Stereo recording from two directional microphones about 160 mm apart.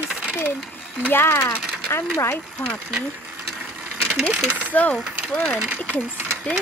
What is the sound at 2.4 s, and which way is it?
Speech, 5° left (ahead or behind).